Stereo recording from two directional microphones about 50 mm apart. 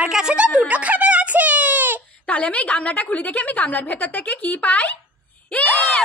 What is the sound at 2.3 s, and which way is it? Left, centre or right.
A woman's voice, left.